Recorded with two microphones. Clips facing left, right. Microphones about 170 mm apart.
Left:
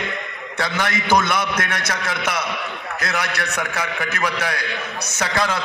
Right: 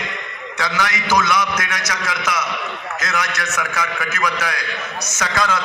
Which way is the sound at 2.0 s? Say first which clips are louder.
Right 3 dB; 30° left (ahead or behind).